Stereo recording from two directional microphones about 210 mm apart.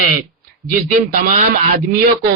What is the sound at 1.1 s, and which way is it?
Speech, 40° right (ahead or behind).